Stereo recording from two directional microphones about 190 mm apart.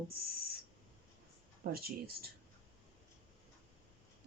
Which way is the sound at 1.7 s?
55° right (ahead or behind).